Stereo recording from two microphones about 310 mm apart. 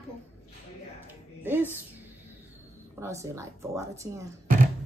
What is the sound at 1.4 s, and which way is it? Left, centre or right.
Speech, centre.